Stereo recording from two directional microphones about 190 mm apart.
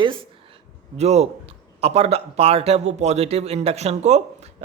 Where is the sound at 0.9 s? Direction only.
35° right (ahead or behind).